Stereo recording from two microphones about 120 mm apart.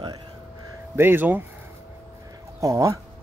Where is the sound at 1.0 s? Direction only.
15° right (ahead or behind).